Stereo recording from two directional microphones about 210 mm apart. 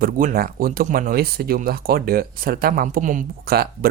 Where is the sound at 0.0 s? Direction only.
45° right (ahead or behind).